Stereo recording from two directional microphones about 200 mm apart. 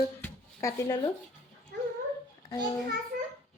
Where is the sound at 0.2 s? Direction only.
15° left (ahead or behind).